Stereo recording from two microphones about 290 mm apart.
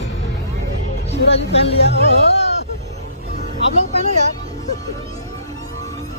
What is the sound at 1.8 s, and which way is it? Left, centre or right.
Speech, left.